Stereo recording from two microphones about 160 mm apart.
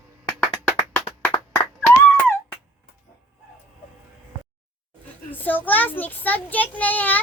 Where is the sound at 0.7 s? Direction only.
15° left (ahead or behind).